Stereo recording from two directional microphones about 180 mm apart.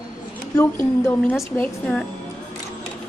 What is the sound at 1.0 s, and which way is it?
Speech, 15° left (ahead or behind).